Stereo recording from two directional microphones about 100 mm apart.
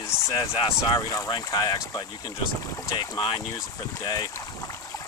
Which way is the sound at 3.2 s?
55° left (ahead or behind).